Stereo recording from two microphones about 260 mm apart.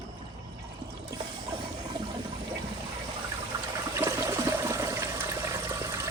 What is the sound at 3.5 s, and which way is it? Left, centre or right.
Toilet flush, centre.